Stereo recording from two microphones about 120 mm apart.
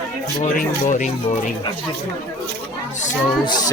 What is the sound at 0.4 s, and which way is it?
Speech, 90° left.